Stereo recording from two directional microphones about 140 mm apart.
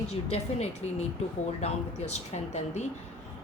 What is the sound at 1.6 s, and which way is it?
A woman's voice, 50° left (ahead or behind).